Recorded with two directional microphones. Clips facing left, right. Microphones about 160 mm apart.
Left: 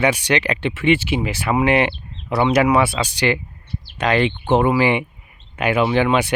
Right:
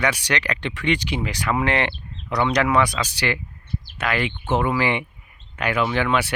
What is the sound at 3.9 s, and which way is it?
Speech, 25° left (ahead or behind).